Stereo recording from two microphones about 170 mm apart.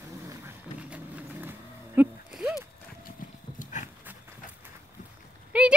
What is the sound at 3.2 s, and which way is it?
Dog, 50° left (ahead or behind).